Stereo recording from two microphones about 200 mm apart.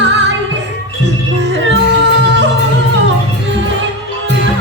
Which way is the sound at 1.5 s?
70° right (ahead or behind).